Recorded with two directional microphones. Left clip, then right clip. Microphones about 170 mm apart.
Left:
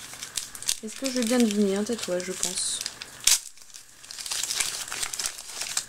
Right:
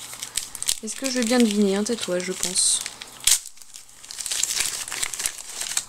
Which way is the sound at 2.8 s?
Centre (ahead or behind).